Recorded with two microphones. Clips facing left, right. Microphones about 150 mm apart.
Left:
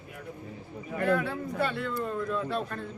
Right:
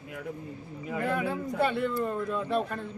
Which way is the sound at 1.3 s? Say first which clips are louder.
Right 3 dB; 5° right (ahead or behind).